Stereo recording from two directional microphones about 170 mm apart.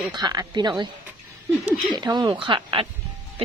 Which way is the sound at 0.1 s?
25° right (ahead or behind).